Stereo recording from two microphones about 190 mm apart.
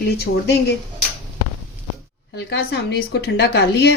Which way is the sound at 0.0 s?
60° left (ahead or behind).